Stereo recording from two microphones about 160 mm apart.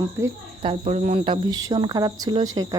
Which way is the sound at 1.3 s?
25° right (ahead or behind).